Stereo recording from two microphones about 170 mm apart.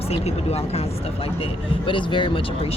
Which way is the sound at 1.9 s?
30° left (ahead or behind).